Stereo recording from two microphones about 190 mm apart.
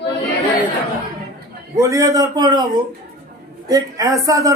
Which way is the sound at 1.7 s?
15° right (ahead or behind).